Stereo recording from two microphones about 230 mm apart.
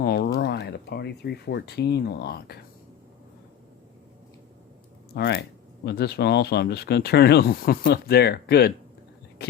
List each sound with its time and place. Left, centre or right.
0.0 s a sound: left
0.3 s speech: left
5.1 s speech: left